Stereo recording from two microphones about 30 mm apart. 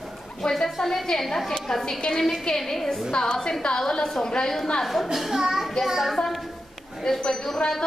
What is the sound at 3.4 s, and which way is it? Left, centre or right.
A woman's voice, left.